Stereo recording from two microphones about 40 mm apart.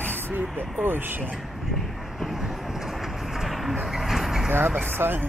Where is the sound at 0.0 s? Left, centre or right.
Right.